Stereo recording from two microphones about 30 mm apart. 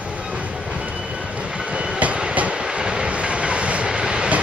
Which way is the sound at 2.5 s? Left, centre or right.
Right.